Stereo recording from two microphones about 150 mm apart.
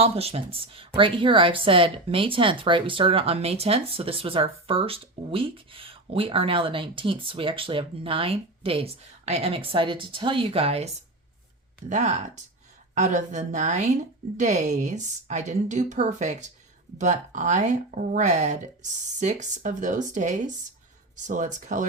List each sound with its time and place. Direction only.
0.0 s speech: 40° right (ahead or behind)